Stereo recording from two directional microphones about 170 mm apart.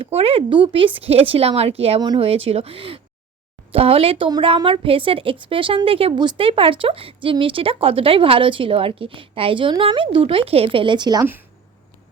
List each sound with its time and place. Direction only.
0.0 s speech: 35° right (ahead or behind)